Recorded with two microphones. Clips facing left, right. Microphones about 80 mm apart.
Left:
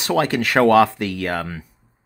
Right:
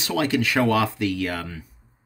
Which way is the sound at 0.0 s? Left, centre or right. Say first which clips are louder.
Left 3 dB; left.